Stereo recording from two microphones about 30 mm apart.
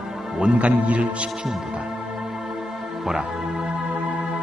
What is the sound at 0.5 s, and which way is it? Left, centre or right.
Speech, right.